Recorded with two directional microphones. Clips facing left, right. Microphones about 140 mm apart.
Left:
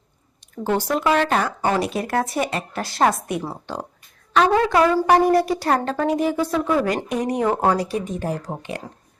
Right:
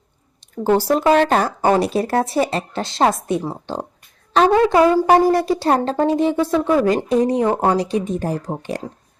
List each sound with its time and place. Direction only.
0.6 s a woman's voice: 35° right (ahead or behind)
6.3 s speech: centre (ahead or behind)
6.6 s a woman's voice: 25° right (ahead or behind)